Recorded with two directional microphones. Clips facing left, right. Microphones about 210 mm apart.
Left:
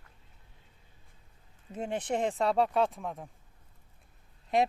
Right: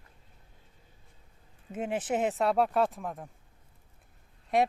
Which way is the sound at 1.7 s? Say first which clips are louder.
Right 2 dB; 5° right (ahead or behind).